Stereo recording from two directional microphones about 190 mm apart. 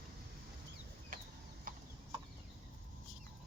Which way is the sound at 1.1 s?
45° right (ahead or behind).